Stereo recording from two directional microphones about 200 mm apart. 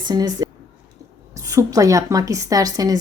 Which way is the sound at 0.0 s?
20° right (ahead or behind).